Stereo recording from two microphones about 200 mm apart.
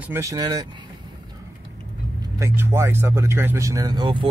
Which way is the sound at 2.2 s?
15° right (ahead or behind).